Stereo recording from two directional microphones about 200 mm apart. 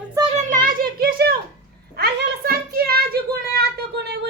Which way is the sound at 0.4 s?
40° right (ahead or behind).